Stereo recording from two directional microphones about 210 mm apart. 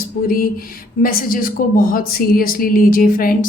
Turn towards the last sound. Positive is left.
turn(degrees=40)  # may be behind; listen again after turning